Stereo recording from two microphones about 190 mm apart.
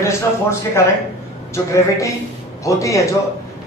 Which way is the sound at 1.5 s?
15° left (ahead or behind).